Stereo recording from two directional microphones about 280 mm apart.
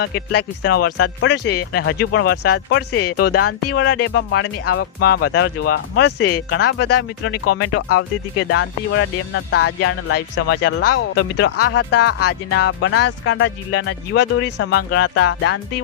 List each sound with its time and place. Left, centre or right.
0.0 s speech: left